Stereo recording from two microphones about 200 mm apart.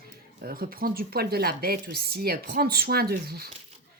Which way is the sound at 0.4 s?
45° right (ahead or behind).